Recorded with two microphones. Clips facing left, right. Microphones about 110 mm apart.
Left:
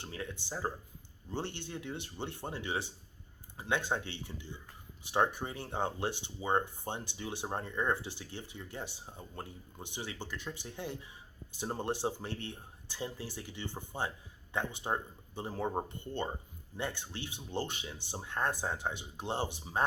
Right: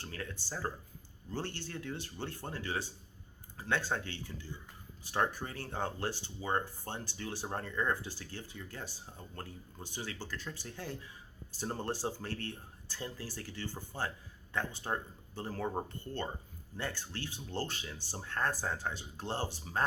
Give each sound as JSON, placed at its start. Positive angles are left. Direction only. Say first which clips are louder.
{"t": 0.0, "sound": "speech", "louder": "left 1 dB", "side_deg": 20}